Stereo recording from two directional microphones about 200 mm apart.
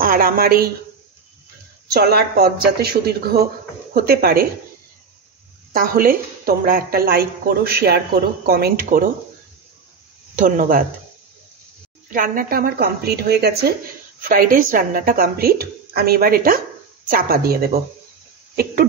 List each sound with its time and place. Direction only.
0.0 s a woman's voice: 45° right (ahead or behind)
2.0 s a woman's voice: 50° right (ahead or behind)
5.7 s a woman's voice: 45° right (ahead or behind)
10.4 s a woman's voice: 40° right (ahead or behind)
12.1 s a woman's voice: 45° right (ahead or behind)